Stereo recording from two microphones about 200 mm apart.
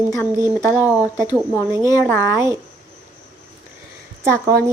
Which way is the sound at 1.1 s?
15° right (ahead or behind).